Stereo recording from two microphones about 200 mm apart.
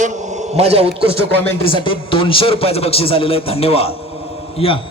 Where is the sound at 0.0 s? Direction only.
35° right (ahead or behind).